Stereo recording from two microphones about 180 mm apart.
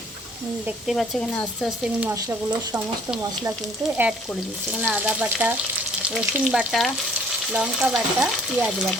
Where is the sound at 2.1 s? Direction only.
20° right (ahead or behind).